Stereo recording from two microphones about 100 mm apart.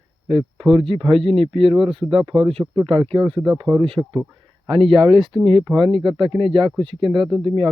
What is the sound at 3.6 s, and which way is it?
Speech, 50° right (ahead or behind).